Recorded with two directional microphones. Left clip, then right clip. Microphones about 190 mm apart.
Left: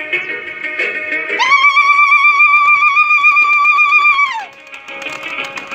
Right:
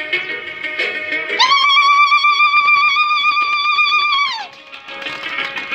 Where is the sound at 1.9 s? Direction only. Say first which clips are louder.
Left 2 dB; 15° left (ahead or behind).